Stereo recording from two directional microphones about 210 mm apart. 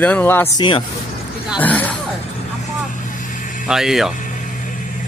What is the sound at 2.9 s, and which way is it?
Vehicle, 40° left (ahead or behind).